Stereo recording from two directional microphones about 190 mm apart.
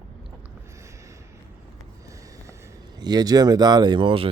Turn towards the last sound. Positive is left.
turn(degrees=-25)  # may be behind; listen again after turning